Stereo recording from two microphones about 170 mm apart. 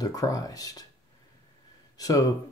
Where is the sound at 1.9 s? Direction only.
20° left (ahead or behind).